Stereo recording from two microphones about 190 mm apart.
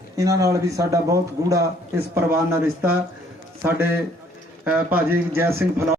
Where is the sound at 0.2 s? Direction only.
15° right (ahead or behind).